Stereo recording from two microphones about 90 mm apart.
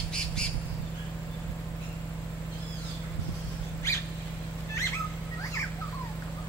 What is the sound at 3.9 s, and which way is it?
Vehicle, 35° left (ahead or behind).